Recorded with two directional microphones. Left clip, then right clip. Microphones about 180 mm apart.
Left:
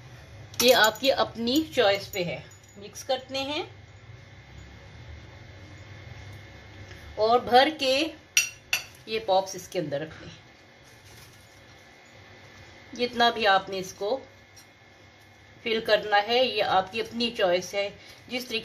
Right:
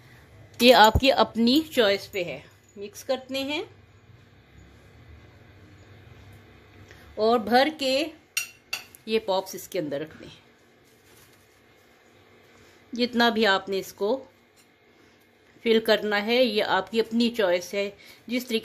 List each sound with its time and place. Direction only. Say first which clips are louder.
0.6 s a woman's voice: right 4 dB; 45° right (ahead or behind); by 3.6 s 70° right (ahead or behind)
7.2 s speech: left 1 dB; 70° right (ahead or behind)
12.9 s a woman's voice: right 1 dB; 70° right (ahead or behind)
15.6 s a woman's voice: right 3 dB; 70° right (ahead or behind)